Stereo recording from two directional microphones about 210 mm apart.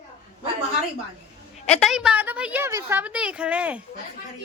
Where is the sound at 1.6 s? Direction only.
5° left (ahead or behind).